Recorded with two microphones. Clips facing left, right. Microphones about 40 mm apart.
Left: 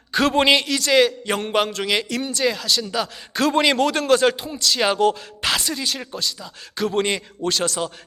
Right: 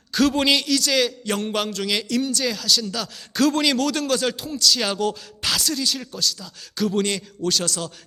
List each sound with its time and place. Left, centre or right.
0.1 s a man's voice: left
5.5 s a man's voice: left